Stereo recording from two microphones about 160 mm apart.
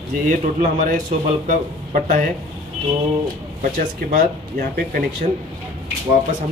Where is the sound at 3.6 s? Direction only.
60° right (ahead or behind).